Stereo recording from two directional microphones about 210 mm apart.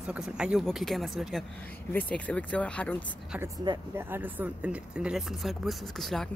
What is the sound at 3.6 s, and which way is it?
Speech, 20° right (ahead or behind).